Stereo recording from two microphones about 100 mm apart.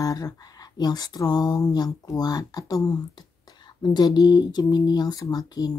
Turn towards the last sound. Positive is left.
turn(degrees=40)  # may be behind; listen again after turning